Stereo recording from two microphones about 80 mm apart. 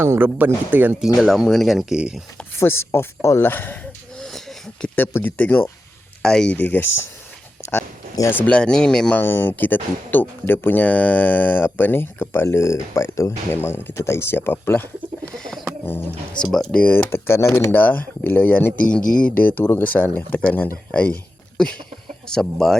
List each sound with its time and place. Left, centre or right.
0.0 s speech: right
1.0 s speech: centre
2.0 s speech: centre
2.6 s speech: left
4.2 s a sound: centre
4.9 s speech: left
6.2 s speech: centre
6.6 s speech: left
7.6 s a sound: left
8.3 s speech: left
8.5 s speech: centre
9.2 s speech: left
16.4 s speech: centre
16.8 s speech: left; by 22.8 s centre